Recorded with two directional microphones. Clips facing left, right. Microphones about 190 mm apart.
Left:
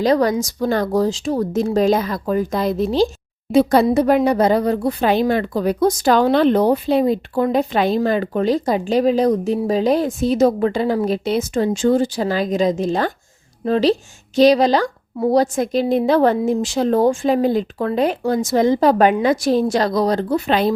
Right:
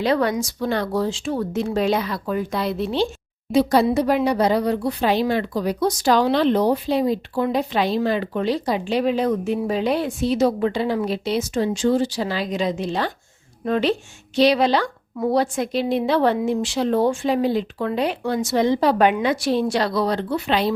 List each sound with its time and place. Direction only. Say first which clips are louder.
0.0 s speech: left 4 dB; 40° left (ahead or behind)
3.5 s speech: left 3 dB; 55° left (ahead or behind)
13.7 s speech: left 4 dB; 35° left (ahead or behind)